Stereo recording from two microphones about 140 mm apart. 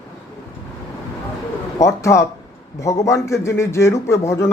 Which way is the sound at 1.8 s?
20° left (ahead or behind).